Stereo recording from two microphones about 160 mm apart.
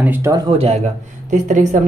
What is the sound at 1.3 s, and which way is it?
Speech, 50° right (ahead or behind).